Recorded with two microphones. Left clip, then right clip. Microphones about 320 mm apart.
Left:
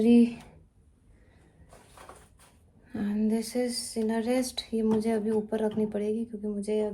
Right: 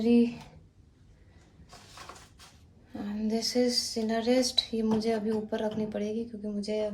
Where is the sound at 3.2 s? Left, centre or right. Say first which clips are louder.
Right 4 dB; centre.